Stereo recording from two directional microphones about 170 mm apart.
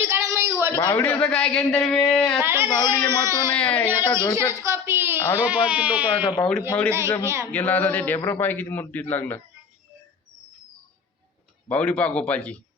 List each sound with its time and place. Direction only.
0.0 s a sound: 15° right (ahead or behind)
0.8 s a man's voice: 15° left (ahead or behind)
2.4 s speech: 15° right (ahead or behind)
2.7 s a man's voice: 15° left (ahead or behind)
3.9 s a woman's voice: 25° left (ahead or behind)
4.6 s a woman's voice: 15° right (ahead or behind)
6.1 s a woman's voice: 25° left (ahead or behind)
6.4 s a man's voice: 5° left (ahead or behind)
7.2 s speech: 15° right (ahead or behind)
7.5 s a man's voice: 10° left (ahead or behind)
11.7 s a man's voice: 10° left (ahead or behind)